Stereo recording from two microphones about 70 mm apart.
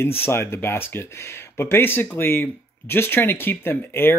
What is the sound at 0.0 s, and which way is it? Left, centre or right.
Speech, left.